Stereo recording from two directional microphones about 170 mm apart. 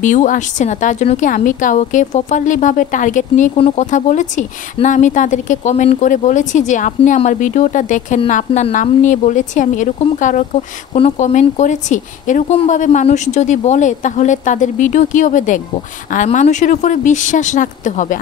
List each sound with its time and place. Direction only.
0.0 s speech: 45° left (ahead or behind)
3.5 s speech: 35° left (ahead or behind)
3.8 s speech: 45° left (ahead or behind)